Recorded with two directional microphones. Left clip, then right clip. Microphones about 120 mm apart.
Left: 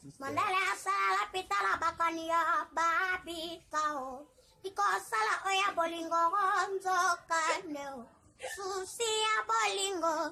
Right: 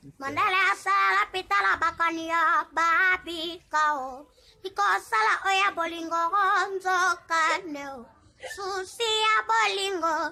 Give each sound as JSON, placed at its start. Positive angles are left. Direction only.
{"t": 0.2, "sound": "a woman's voice", "side_deg": -20}
{"t": 8.5, "sound": "child singing", "side_deg": -15}